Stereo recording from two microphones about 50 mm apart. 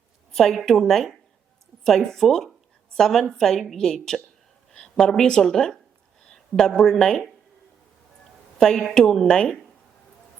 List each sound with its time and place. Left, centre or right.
0.3 s a woman's voice: centre
6.2 s a sound: centre
6.9 s a woman's voice: centre
8.5 s a woman's voice: centre